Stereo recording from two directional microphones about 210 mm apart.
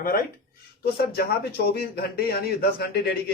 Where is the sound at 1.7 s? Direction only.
50° left (ahead or behind).